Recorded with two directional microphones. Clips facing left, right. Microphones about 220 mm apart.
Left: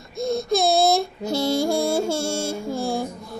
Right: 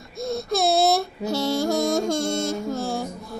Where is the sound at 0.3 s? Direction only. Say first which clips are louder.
Left 2 dB; 15° left (ahead or behind).